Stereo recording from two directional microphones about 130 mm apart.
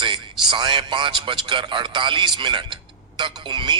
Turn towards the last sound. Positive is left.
turn(degrees=-40)  # may be behind; listen again after turning